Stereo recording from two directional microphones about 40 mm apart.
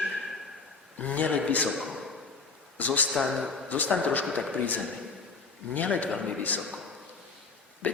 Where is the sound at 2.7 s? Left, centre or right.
Left.